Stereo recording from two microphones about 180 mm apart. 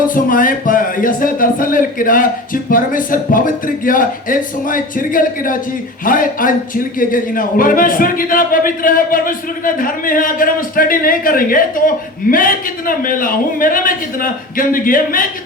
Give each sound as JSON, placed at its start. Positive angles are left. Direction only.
{"t": 0.1, "sound": "a man's voice", "side_deg": 50}